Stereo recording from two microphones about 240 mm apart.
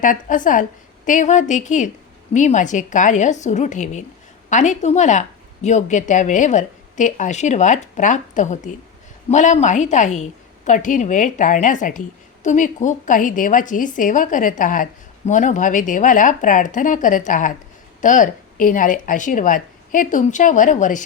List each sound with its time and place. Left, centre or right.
0.0 s a woman's voice: left